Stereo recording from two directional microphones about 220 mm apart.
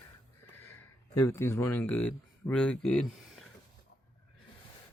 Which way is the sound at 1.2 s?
10° left (ahead or behind).